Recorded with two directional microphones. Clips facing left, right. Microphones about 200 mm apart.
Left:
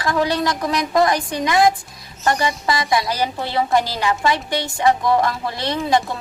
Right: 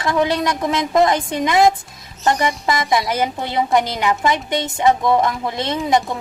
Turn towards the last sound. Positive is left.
turn(degrees=-20)  # may be behind; listen again after turning